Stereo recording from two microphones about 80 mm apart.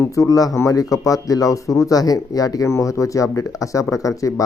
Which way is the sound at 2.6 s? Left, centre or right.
Left.